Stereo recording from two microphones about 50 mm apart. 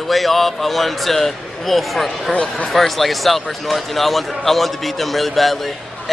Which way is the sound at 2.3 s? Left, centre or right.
Left.